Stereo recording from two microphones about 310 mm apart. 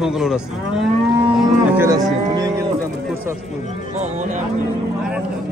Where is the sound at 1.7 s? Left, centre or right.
Centre.